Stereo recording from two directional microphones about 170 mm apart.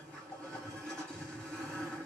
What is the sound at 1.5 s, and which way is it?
Vehicle, 5° left (ahead or behind).